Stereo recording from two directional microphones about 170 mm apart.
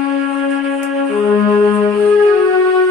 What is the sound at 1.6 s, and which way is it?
Music, 20° left (ahead or behind).